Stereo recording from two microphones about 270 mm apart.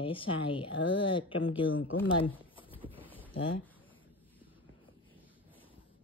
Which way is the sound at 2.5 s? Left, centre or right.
Centre.